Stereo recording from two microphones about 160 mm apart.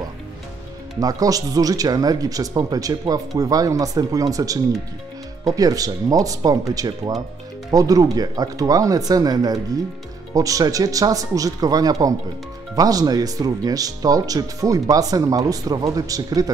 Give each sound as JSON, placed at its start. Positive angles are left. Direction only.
{"t": 0.9, "sound": "speech", "side_deg": -20}